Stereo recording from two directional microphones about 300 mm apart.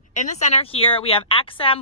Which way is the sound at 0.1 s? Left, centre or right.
Left.